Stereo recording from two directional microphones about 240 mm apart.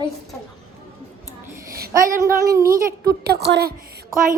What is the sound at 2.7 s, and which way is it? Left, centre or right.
Speech, right.